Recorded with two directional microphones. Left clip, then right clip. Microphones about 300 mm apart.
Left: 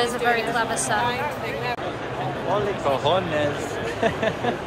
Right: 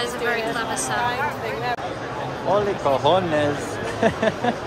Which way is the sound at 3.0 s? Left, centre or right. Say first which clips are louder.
Right 4 dB; right.